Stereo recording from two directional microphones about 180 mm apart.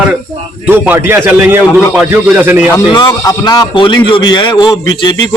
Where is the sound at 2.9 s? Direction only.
20° left (ahead or behind).